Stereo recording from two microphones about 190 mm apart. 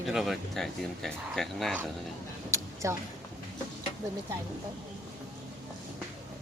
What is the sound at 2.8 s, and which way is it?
Speech, 15° right (ahead or behind).